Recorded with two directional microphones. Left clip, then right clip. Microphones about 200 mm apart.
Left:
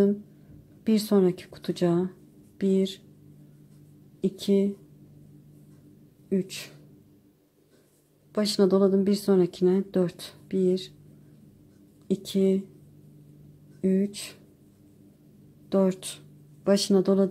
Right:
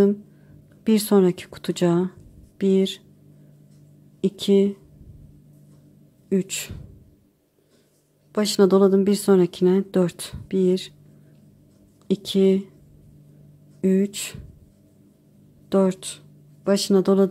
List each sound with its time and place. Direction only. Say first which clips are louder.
0.8 s speech: right 5 dB; 15° right (ahead or behind)
4.2 s speech: right 6 dB; 10° right (ahead or behind)
6.2 s speech: right 5 dB; 15° right (ahead or behind)
8.3 s speech: right 5 dB; 10° right (ahead or behind)
12.1 s speech: right 6 dB; 10° right (ahead or behind)
13.7 s speech: right 5 dB; 15° right (ahead or behind)
15.7 s speech: right 4 dB; 10° right (ahead or behind)